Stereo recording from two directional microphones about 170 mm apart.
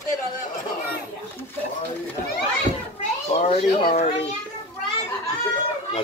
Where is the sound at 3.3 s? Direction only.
35° left (ahead or behind).